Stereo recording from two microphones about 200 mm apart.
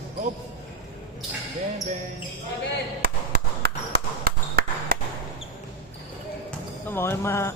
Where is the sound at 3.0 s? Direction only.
50° right (ahead or behind).